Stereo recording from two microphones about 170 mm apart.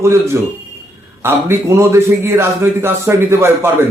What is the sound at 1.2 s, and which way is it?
A man's voice, 15° right (ahead or behind).